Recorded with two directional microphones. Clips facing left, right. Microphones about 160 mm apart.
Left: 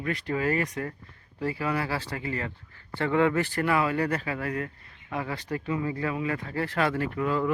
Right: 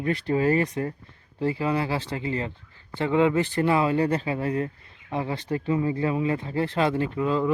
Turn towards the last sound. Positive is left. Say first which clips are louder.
# right 3 dB
turn(degrees=-20)  # may be behind; listen again after turning